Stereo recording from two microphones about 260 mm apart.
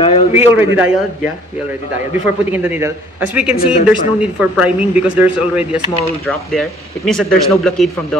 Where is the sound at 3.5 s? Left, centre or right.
Left.